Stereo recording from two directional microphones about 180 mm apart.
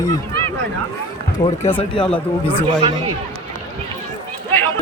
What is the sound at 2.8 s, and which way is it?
Speech, 25° right (ahead or behind).